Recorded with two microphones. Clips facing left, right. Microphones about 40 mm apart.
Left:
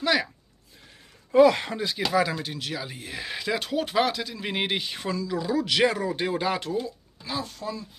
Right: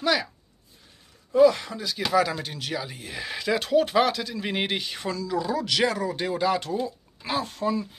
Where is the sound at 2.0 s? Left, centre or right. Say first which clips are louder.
Right 2 dB; centre.